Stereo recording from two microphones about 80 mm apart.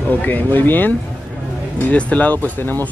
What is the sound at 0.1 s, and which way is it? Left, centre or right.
Speech, left.